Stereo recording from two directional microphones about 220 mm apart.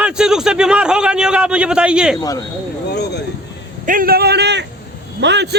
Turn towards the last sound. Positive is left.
turn(degrees=-50)  # may be behind; listen again after turning